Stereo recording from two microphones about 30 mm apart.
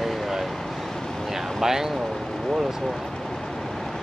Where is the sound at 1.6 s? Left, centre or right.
Centre.